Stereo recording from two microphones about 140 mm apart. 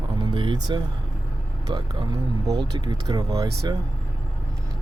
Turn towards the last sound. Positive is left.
turn(degrees=-25)  # may be behind; listen again after turning